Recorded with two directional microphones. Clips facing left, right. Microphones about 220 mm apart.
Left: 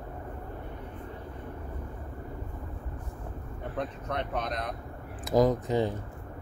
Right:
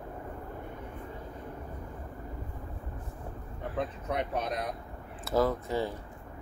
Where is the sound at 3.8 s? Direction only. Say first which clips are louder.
Right 1 dB; 10° right (ahead or behind).